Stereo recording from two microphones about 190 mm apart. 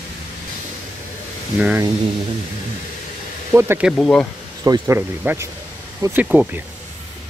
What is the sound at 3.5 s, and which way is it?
Speech, 10° right (ahead or behind).